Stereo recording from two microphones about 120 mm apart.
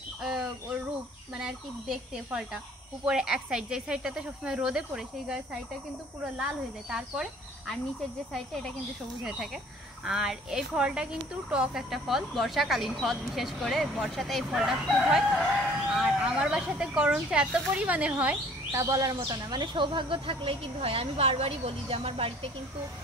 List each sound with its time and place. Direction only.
0.2 s speech: 5° right (ahead or behind)
10.0 s speech: 5° right (ahead or behind)
18.8 s speech: 25° right (ahead or behind)
19.1 s speech: 35° right (ahead or behind)